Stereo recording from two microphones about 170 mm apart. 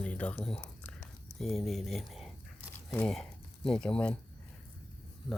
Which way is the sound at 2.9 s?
5° left (ahead or behind).